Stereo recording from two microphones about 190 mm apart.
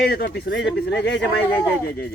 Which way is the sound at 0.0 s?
60° left (ahead or behind).